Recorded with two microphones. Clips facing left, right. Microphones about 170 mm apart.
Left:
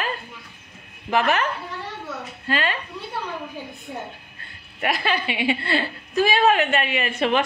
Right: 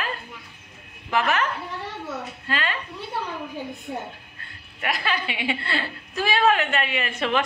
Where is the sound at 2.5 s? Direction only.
30° left (ahead or behind).